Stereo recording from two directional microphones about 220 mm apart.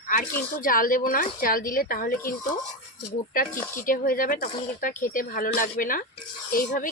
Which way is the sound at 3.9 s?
40° left (ahead or behind).